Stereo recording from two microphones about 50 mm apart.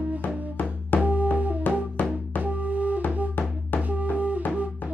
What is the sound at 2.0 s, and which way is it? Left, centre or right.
Music, left.